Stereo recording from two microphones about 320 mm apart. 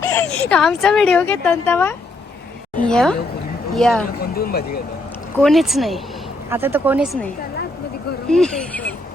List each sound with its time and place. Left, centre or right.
0.0 s a sound: centre
0.5 s a woman's voice: centre
4.4 s speech: left
5.4 s a woman's voice: centre
8.3 s speech: centre